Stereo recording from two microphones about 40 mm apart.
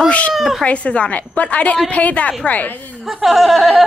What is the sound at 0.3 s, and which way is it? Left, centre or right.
Speech, centre.